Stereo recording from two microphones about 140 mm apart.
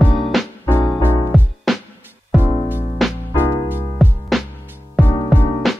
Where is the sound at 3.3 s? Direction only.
15° right (ahead or behind).